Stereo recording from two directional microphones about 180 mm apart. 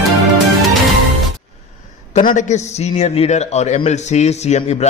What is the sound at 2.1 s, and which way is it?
A man's voice, 40° left (ahead or behind).